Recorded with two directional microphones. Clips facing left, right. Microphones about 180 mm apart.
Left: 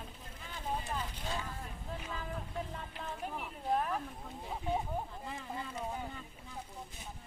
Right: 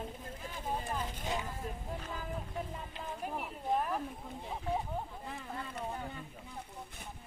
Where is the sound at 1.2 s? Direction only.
15° right (ahead or behind).